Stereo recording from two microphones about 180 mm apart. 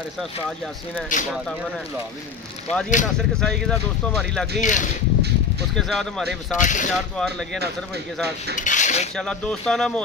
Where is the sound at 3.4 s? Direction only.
5° left (ahead or behind).